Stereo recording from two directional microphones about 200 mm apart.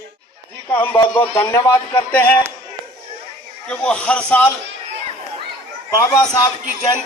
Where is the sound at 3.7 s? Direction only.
5° left (ahead or behind).